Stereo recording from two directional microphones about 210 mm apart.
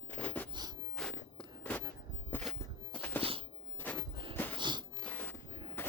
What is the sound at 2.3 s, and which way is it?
Walk, 5° left (ahead or behind).